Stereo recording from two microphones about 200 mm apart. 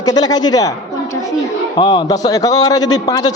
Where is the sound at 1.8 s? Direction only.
25° left (ahead or behind).